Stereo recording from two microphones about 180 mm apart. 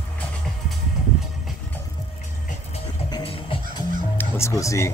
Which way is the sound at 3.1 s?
25° left (ahead or behind).